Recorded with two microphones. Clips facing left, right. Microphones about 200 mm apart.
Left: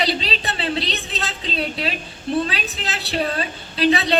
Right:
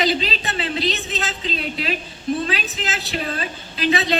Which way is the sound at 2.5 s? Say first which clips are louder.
Right 1 dB; 35° left (ahead or behind).